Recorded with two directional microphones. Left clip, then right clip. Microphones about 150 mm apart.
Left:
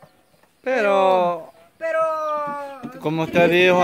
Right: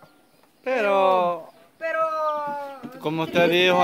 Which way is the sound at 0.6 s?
20° left (ahead or behind).